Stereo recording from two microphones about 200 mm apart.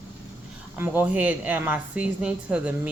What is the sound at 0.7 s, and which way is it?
Speech, 10° right (ahead or behind).